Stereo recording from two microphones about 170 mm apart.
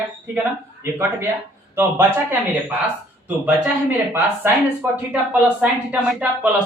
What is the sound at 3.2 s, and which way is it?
Speech, 10° right (ahead or behind).